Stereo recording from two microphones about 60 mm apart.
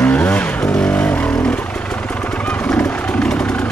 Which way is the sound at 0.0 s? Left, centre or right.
Left.